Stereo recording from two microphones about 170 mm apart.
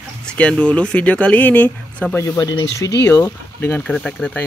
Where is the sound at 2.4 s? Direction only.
25° left (ahead or behind); by 4.4 s 5° left (ahead or behind).